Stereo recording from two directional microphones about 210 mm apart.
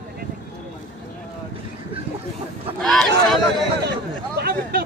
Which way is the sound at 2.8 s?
Centre (ahead or behind).